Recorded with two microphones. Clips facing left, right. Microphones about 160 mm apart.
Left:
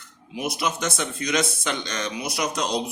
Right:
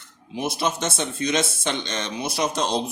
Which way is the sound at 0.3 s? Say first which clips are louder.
Right 2 dB; 25° right (ahead or behind).